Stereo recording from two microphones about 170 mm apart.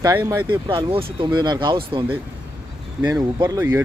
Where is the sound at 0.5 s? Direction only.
30° right (ahead or behind).